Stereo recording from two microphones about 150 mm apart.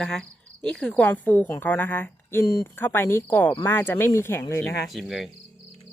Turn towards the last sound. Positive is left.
turn(degrees=0)  # may be behind; listen again after turning